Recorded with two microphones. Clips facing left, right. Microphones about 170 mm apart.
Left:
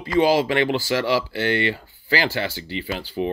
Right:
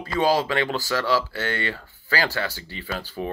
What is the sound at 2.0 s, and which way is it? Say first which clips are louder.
Speech: left 3 dB; 20° left (ahead or behind).